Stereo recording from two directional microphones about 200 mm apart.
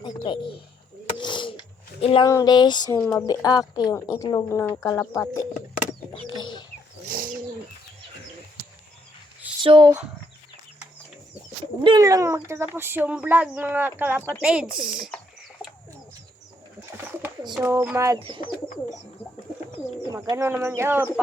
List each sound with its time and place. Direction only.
0.0 s bird: 25° left (ahead or behind)
1.2 s a sound: 25° left (ahead or behind)
3.0 s speech: 10° left (ahead or behind)
3.2 s a sound: 20° left (ahead or behind)
3.8 s speech: 15° left (ahead or behind)
6.3 s bird: 20° left (ahead or behind)
7.1 s bird: 45° right (ahead or behind)
9.6 s speech: 20° right (ahead or behind)
11.8 s speech: 20° right (ahead or behind); by 15.2 s 5° right (ahead or behind)
17.5 s speech: 10° right (ahead or behind)
20.1 s speech: 15° right (ahead or behind)